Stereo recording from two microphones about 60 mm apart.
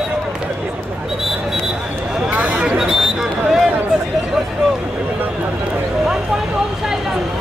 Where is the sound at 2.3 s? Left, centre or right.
Centre.